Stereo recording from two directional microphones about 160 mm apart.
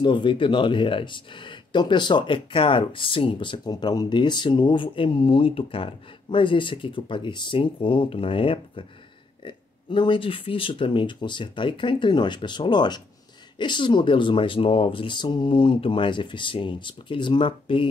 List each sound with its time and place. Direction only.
0.0 s speech: 30° left (ahead or behind)